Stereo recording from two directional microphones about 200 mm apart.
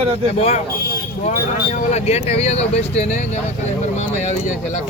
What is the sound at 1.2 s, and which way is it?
Speech, 35° left (ahead or behind).